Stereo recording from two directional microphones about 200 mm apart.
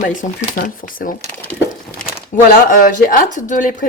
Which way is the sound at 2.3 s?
40° left (ahead or behind).